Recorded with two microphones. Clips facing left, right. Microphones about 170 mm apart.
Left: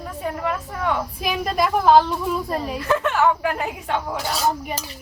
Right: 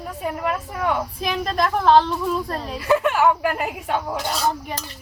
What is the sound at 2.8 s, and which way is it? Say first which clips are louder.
Speech: right 3 dB; 10° right (ahead or behind).